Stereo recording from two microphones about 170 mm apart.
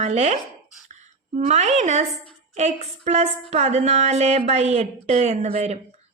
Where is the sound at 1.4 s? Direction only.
45° right (ahead or behind).